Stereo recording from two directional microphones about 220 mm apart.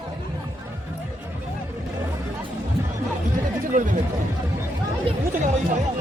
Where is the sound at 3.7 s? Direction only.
35° right (ahead or behind).